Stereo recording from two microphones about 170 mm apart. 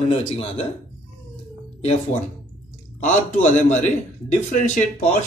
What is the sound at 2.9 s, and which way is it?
A man's voice, 45° left (ahead or behind).